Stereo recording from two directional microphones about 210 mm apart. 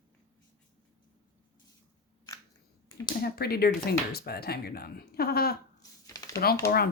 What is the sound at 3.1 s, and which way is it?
Speech, 45° left (ahead or behind).